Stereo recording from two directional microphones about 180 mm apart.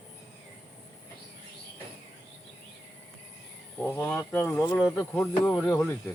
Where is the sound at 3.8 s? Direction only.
5° left (ahead or behind).